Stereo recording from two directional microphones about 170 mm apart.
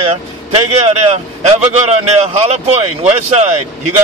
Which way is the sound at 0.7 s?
35° right (ahead or behind).